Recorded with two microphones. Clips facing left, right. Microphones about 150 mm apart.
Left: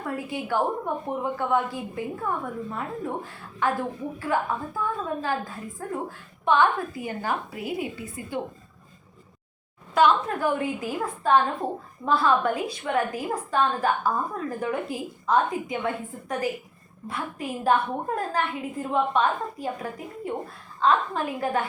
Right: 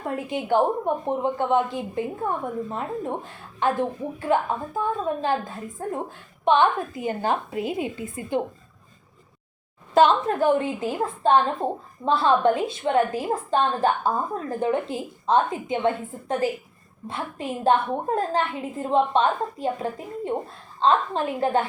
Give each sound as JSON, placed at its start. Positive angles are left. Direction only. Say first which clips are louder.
{"t": 0.3, "sound": "a woman's voice", "louder": "right 5 dB", "side_deg": -20}
{"t": 9.9, "sound": "a woman's voice", "louder": "right 3 dB", "side_deg": -25}